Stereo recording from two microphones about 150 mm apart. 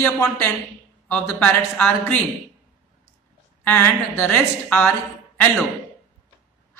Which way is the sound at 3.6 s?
15° left (ahead or behind).